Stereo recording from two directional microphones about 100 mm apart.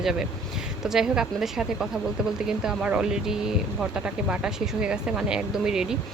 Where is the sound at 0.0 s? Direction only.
5° right (ahead or behind).